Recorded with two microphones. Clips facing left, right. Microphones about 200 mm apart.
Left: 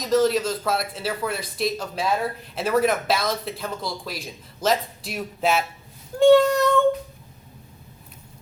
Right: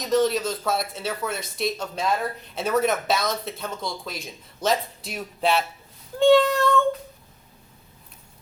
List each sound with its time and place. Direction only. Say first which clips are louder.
0.1 s speech: left 2 dB; centre (ahead or behind)
6.1 s meow: left 2 dB; 10° left (ahead or behind)